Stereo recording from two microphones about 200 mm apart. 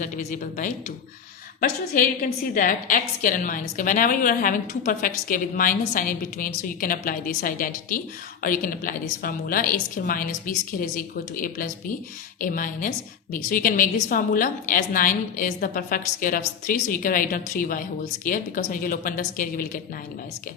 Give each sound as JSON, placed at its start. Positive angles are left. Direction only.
{"t": 0.0, "sound": "a woman's voice", "side_deg": 40}